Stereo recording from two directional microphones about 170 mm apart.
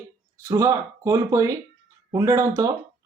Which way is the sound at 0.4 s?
20° right (ahead or behind).